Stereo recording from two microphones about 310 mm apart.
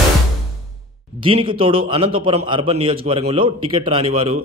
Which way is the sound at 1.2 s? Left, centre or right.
Centre.